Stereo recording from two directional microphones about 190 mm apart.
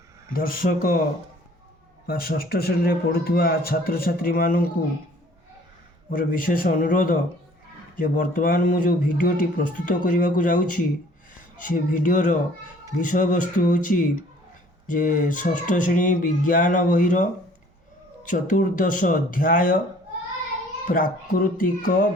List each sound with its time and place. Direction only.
0.3 s a man's voice: 50° left (ahead or behind)
2.0 s a man's voice: 50° left (ahead or behind)
6.1 s a man's voice: 45° left (ahead or behind)
18.3 s a man's voice: 45° left (ahead or behind)
20.8 s a man's voice: 50° left (ahead or behind)